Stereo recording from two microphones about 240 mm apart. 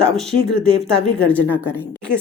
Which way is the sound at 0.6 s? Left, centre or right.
Right.